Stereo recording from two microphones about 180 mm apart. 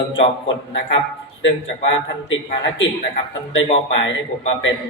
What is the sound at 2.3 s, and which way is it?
Speech, 90° left.